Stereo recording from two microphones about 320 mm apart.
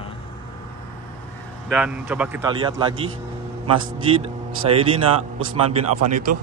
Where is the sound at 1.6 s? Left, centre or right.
Centre.